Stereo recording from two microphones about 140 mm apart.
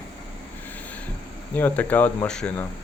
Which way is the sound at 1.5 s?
10° left (ahead or behind).